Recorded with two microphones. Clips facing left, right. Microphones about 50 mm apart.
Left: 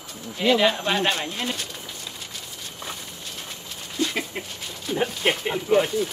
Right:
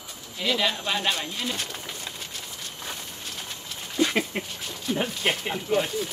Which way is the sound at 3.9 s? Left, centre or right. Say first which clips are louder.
Right 2 dB; right.